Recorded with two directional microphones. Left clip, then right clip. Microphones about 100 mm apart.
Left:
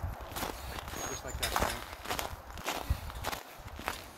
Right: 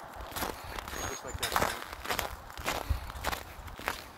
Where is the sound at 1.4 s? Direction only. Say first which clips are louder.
Right 2 dB; 25° left (ahead or behind).